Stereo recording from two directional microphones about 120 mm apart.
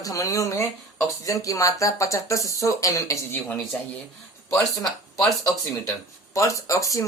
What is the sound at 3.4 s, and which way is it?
Speech, 5° left (ahead or behind).